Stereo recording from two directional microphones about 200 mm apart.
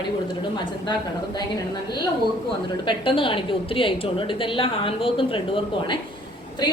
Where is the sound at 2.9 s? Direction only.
25° left (ahead or behind).